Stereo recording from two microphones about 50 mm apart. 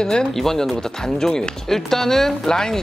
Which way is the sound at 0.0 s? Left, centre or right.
Centre.